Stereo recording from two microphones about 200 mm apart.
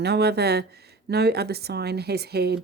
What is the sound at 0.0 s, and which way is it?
Speech, 55° right (ahead or behind).